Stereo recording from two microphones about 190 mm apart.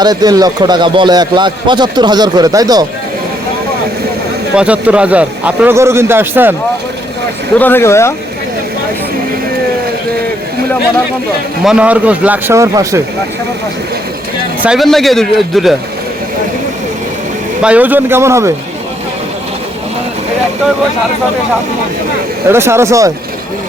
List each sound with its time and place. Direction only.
0.0 s a man's voice: 20° right (ahead or behind)
4.5 s a man's voice: 5° right (ahead or behind)
7.6 s speech: 10° left (ahead or behind)
11.6 s a man's voice: 5° right (ahead or behind)
14.6 s speech: centre (ahead or behind)
17.6 s a man's voice: 5° right (ahead or behind)
22.4 s a man's voice: 15° right (ahead or behind)